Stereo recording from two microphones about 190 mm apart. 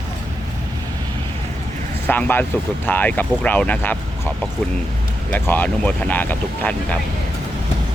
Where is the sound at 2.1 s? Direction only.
10° left (ahead or behind).